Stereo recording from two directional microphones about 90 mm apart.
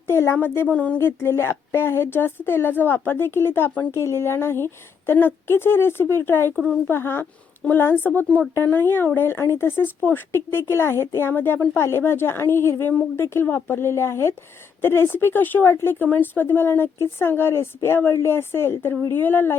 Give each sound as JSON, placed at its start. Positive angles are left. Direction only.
{"t": 0.1, "sound": "a sound", "side_deg": 30}
{"t": 0.3, "sound": "a woman's voice", "side_deg": 25}
{"t": 0.9, "sound": "a woman's voice", "side_deg": 25}